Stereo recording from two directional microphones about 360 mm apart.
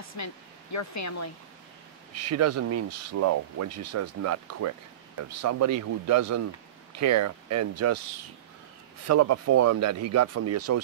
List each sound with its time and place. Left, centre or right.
0.1 s speech: left
2.1 s speech: right
9.0 s speech: right